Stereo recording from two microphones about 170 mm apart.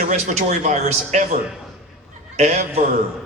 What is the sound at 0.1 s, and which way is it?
A man's voice, 45° right (ahead or behind).